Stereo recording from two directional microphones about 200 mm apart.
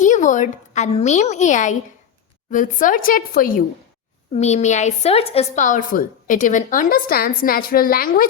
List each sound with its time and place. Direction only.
0.0 s a woman's voice: 40° left (ahead or behind)
4.4 s a woman's voice: 35° left (ahead or behind)